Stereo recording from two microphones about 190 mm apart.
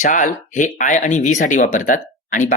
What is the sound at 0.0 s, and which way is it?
Speech, 45° left (ahead or behind).